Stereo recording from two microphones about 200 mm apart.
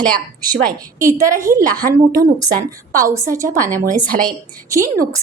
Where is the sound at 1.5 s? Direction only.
15° right (ahead or behind).